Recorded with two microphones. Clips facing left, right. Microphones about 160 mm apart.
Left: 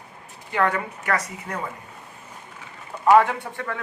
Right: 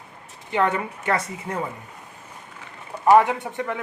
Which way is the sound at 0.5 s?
20° right (ahead or behind).